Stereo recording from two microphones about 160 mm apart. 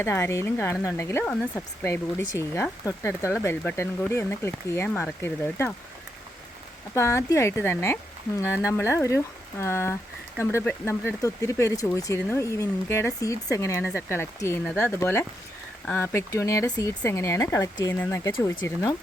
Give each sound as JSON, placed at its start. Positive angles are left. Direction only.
{"t": 0.0, "sound": "speech", "side_deg": 15}
{"t": 6.9, "sound": "speech", "side_deg": 20}